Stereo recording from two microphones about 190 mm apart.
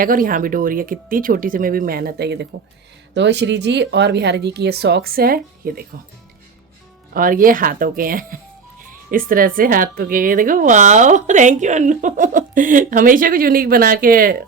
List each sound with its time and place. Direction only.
0.0 s a woman's voice: 45° right (ahead or behind)
7.1 s a woman's voice: 45° right (ahead or behind)